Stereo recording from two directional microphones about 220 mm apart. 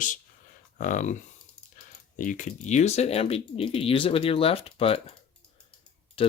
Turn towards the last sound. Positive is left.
turn(degrees=25)  # may be behind; listen again after turning